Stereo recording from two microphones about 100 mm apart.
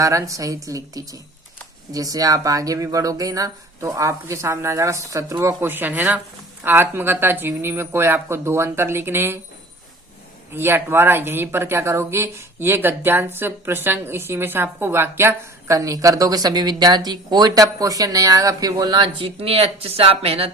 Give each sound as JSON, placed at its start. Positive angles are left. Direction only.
{"t": 0.0, "sound": "speech", "side_deg": -30}
{"t": 10.5, "sound": "speech", "side_deg": -25}
{"t": 19.4, "sound": "speech", "side_deg": -80}